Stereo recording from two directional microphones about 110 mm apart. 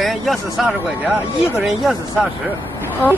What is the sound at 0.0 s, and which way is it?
Speech, centre (ahead or behind).